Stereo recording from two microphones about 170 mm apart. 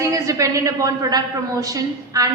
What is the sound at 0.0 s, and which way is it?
A woman's voice, 20° right (ahead or behind).